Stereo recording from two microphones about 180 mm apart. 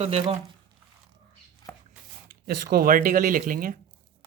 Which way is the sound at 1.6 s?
20° left (ahead or behind).